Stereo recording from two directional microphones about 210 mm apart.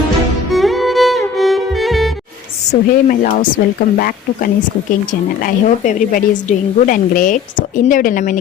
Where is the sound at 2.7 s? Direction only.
40° left (ahead or behind).